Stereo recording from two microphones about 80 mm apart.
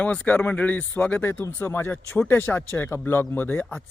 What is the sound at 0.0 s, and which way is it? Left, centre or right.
Speech, centre.